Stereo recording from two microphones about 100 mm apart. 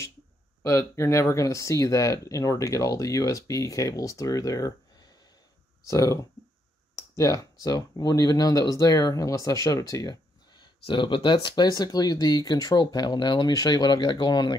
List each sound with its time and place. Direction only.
0.6 s speech: 25° left (ahead or behind)
5.9 s speech: 35° left (ahead or behind)
7.2 s speech: 35° left (ahead or behind)
10.6 s speech: 55° left (ahead or behind)